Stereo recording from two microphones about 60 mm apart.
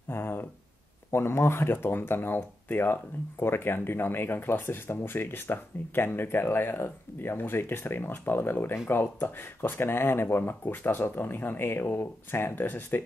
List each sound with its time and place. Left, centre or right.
0.1 s speech: left